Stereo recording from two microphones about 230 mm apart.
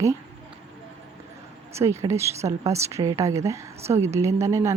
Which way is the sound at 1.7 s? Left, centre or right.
Centre.